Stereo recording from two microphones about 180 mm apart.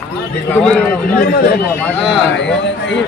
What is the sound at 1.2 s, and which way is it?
Speech, 60° left (ahead or behind).